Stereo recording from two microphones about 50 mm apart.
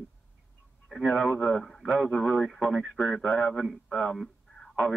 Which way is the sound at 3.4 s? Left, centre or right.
Centre.